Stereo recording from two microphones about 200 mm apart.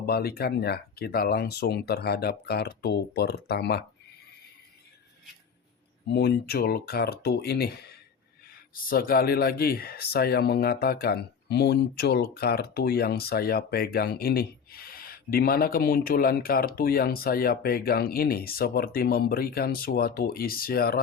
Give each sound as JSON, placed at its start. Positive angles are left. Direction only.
{"t": 0.0, "sound": "speech", "side_deg": 50}
{"t": 6.1, "sound": "speech", "side_deg": 55}